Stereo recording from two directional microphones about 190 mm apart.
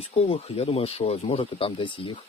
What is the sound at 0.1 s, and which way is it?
Speech, 30° left (ahead or behind).